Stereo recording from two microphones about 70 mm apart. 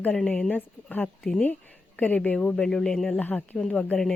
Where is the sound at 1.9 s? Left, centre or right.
Left.